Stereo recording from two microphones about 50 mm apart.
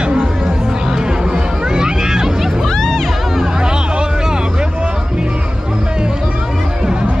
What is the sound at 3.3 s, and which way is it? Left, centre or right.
Hubbub, centre.